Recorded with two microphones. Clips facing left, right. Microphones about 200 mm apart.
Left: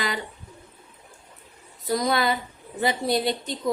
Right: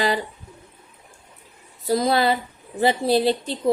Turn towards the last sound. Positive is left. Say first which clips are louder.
# right 5 dB
turn(degrees=-30)  # may be behind; listen again after turning